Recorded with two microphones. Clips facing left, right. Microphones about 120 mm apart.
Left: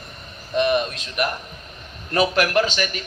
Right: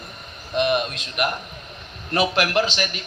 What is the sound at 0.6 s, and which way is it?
A man's voice, 40° left (ahead or behind).